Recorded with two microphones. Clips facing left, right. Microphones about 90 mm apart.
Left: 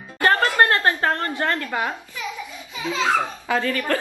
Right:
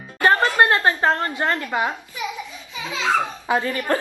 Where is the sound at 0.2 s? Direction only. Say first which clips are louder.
Right 1 dB; 20° right (ahead or behind).